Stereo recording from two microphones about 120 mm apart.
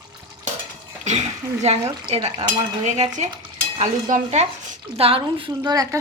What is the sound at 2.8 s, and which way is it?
Stir, 75° right (ahead or behind).